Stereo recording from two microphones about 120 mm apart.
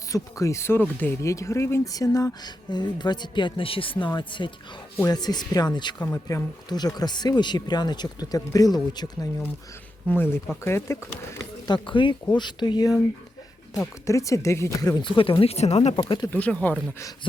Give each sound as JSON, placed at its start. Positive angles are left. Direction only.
{"t": 0.1, "sound": "speech", "side_deg": 25}
{"t": 1.2, "sound": "speech", "side_deg": 25}
{"t": 6.1, "sound": "speech", "side_deg": 25}
{"t": 10.1, "sound": "speech", "side_deg": 20}
{"t": 11.7, "sound": "speech", "side_deg": 40}
{"t": 14.1, "sound": "speech", "side_deg": 25}
{"t": 16.0, "sound": "speech", "side_deg": 40}
{"t": 16.3, "sound": "speech", "side_deg": 10}